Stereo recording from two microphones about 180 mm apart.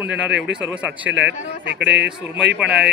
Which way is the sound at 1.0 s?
85° right.